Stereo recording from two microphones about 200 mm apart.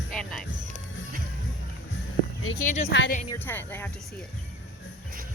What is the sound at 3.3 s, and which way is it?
Speech, 10° left (ahead or behind).